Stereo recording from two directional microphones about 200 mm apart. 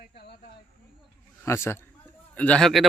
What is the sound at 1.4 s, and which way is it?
A man's voice, 10° left (ahead or behind).